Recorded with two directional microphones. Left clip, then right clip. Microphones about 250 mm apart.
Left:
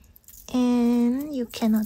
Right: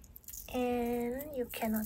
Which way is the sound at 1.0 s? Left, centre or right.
Left.